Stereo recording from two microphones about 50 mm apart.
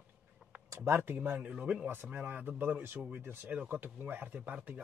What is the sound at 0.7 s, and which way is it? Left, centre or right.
Speech, right.